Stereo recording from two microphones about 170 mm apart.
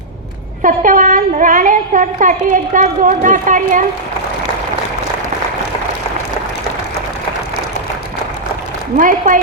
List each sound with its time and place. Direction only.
0.6 s a woman's voice: 50° right (ahead or behind)
9.0 s a woman's voice: 50° right (ahead or behind)